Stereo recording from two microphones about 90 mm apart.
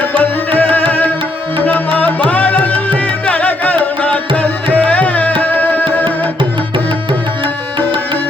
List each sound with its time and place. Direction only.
0.2 s music: 20° left (ahead or behind)
6.7 s music: 65° right (ahead or behind)